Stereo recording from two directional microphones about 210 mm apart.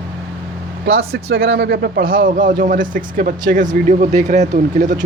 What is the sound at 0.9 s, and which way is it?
A man's voice, 50° right (ahead or behind).